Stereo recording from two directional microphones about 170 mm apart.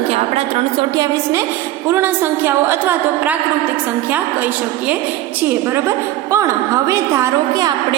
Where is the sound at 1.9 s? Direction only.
15° right (ahead or behind).